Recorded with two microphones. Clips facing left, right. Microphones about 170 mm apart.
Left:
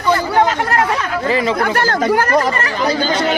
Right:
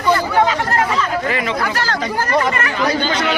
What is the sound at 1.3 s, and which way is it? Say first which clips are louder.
Speech: left 5 dB; 30° left (ahead or behind).